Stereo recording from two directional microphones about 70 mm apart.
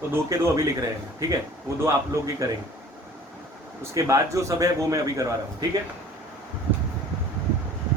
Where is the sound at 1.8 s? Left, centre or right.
Right.